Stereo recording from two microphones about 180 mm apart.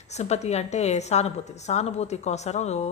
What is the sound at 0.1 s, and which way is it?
A woman's voice, 40° left (ahead or behind).